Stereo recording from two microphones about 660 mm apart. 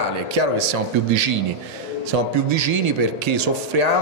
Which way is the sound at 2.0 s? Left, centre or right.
Right.